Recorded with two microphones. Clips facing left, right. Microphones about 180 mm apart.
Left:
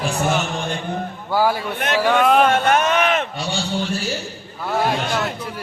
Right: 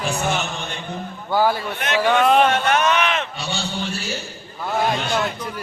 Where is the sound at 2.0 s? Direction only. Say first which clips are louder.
Even; 5° left (ahead or behind).